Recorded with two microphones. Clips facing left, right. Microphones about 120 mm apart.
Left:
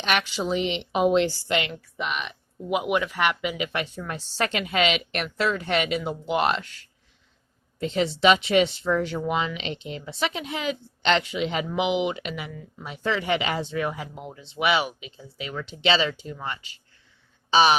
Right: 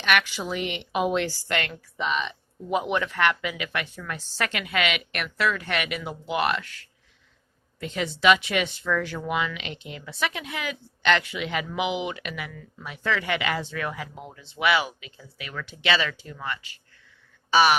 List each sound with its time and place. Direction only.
0.0 s speech: 25° left (ahead or behind)
2.0 s speech: 5° left (ahead or behind); by 17.7 s 25° left (ahead or behind)